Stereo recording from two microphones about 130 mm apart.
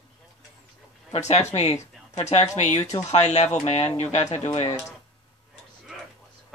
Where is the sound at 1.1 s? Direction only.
60° left (ahead or behind).